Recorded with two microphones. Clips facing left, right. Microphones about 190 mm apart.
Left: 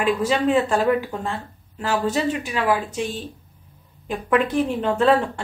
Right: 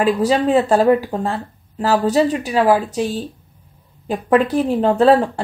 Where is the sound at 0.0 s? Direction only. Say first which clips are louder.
Right 4 dB; 35° right (ahead or behind).